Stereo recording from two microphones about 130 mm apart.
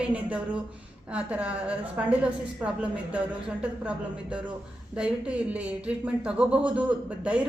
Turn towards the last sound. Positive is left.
turn(degrees=-10)  # may be behind; listen again after turning